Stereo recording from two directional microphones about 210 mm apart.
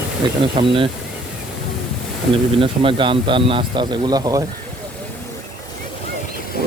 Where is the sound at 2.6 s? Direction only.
25° right (ahead or behind).